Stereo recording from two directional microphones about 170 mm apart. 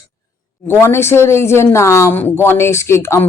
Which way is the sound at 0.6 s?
15° left (ahead or behind).